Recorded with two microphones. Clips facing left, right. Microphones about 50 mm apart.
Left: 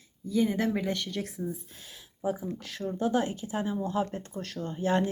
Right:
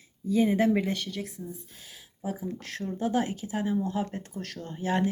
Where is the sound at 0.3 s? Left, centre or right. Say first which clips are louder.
Right 3 dB; centre.